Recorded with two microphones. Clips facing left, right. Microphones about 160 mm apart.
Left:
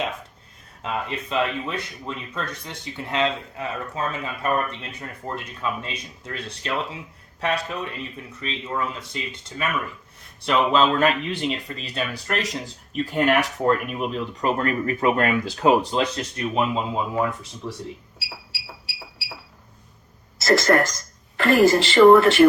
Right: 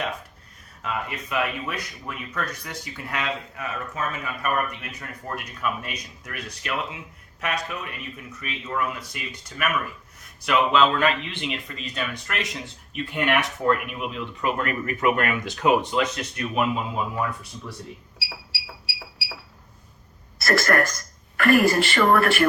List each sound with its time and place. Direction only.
0.8 s speech: 25° left (ahead or behind)
20.4 s a woman's voice: 25° left (ahead or behind)